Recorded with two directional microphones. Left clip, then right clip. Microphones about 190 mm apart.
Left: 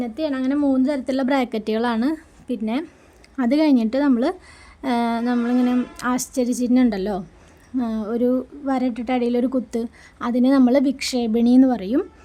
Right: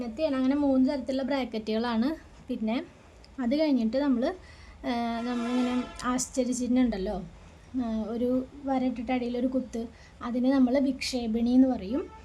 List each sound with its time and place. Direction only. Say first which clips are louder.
0.0 s a woman's voice: left 4 dB; 30° left (ahead or behind)
3.3 s a woman's voice: left 8 dB; 40° left (ahead or behind)